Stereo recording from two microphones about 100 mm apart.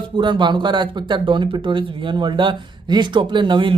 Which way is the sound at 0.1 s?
50° right (ahead or behind).